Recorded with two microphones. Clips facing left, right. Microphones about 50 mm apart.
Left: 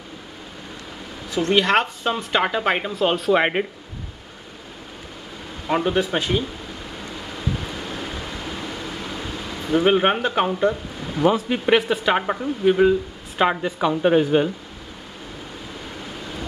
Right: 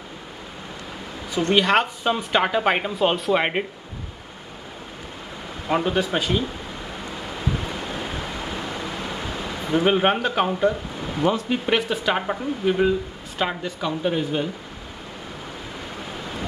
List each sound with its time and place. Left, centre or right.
1.3 s speech: centre
5.7 s speech: centre
9.8 s speech: centre
13.5 s a woman's voice: left
14.0 s speech: left